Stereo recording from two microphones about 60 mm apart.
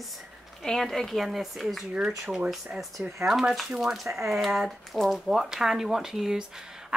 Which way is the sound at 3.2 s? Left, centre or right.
Centre.